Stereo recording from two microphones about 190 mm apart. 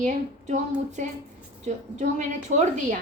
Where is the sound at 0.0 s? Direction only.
40° right (ahead or behind).